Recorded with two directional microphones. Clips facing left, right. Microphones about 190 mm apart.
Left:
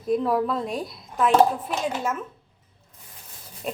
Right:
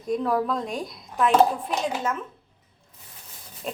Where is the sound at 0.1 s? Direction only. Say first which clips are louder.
Left 2 dB; centre (ahead or behind).